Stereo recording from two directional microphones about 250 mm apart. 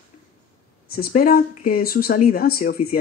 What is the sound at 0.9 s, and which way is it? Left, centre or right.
Speech, left.